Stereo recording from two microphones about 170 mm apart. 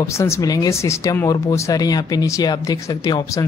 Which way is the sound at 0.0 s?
15° left (ahead or behind).